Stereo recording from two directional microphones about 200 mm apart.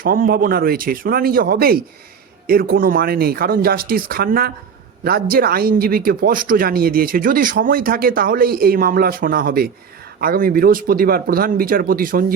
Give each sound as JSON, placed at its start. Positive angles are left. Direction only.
{"t": 0.0, "sound": "speech", "side_deg": -45}